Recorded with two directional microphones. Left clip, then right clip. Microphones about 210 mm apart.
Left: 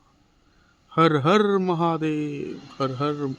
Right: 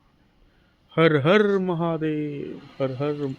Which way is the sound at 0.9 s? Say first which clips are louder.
Right 1 dB; 5° left (ahead or behind).